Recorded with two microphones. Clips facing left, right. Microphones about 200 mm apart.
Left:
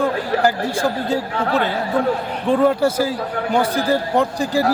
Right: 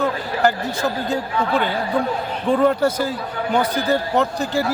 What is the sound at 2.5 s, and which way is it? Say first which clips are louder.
A man's voice: left 1 dB; 10° left (ahead or behind).